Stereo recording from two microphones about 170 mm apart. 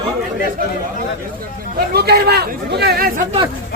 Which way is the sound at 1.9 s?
70° right (ahead or behind).